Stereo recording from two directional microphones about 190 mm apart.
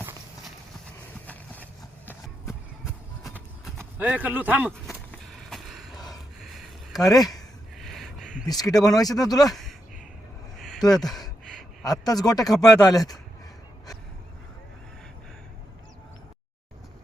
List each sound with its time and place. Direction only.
3.9 s a man's voice: 10° right (ahead or behind)
5.5 s a sound: centre (ahead or behind)
7.0 s speech: 20° left (ahead or behind)
7.8 s a sound: centre (ahead or behind)
8.4 s speech: 20° left (ahead or behind)
11.8 s speech: 20° left (ahead or behind)